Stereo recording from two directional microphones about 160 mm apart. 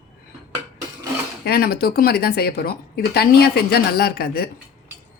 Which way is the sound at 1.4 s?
75° left (ahead or behind).